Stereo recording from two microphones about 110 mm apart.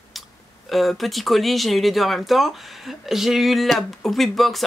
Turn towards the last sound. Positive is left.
turn(degrees=0)  # may be behind; listen again after turning